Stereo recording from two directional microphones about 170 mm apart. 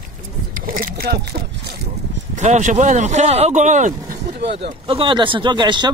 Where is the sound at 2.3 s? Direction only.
45° right (ahead or behind).